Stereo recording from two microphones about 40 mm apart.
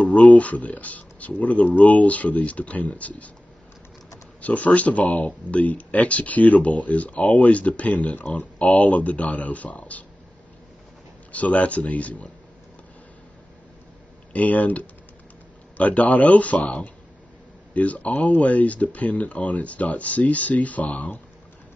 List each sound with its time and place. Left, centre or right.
0.0 s a man's voice: left
4.4 s a man's voice: left
11.3 s a man's voice: left
14.3 s a man's voice: left